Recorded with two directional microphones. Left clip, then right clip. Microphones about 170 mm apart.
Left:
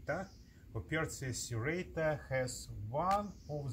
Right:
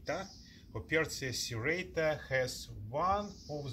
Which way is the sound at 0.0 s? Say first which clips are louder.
Right 1 dB; 20° right (ahead or behind).